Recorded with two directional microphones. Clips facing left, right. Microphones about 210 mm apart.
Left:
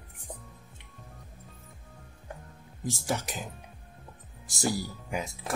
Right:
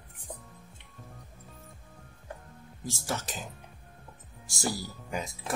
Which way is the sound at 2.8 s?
15° left (ahead or behind).